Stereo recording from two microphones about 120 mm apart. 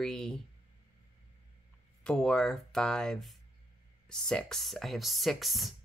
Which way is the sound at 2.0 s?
5° left (ahead or behind).